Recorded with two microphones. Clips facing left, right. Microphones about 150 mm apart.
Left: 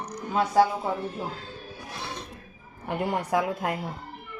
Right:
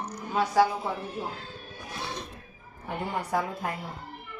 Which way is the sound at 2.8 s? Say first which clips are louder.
Left 4 dB; 80° left.